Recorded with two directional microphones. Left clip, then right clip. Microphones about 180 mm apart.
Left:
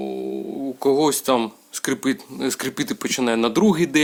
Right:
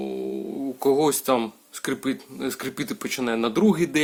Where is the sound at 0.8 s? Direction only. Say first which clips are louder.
Left 2 dB; 20° left (ahead or behind).